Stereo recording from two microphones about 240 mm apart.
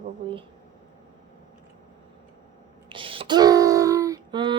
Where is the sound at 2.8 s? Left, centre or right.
Right.